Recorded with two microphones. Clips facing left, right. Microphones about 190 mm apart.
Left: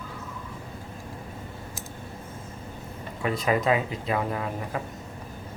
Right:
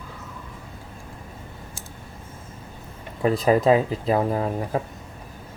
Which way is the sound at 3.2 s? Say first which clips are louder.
Right 6 dB; 35° right (ahead or behind).